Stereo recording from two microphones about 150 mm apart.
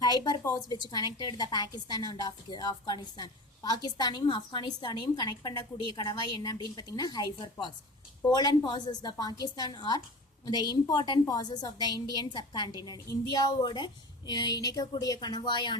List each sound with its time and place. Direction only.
0.0 s a woman's voice: 25° left (ahead or behind)